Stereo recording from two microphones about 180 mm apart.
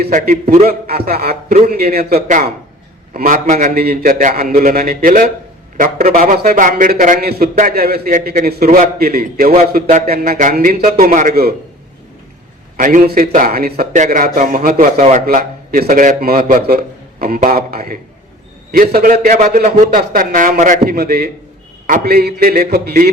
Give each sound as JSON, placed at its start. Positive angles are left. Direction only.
{"t": 0.0, "sound": "a man's voice", "side_deg": -55}
{"t": 12.7, "sound": "a man's voice", "side_deg": -50}